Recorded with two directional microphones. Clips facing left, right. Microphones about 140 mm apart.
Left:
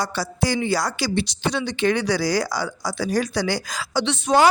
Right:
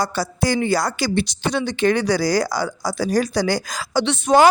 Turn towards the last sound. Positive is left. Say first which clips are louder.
# right 3 dB
turn(degrees=-50)  # may be behind; listen again after turning